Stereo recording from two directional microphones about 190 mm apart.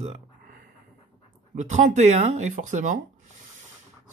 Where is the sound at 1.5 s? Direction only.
40° right (ahead or behind).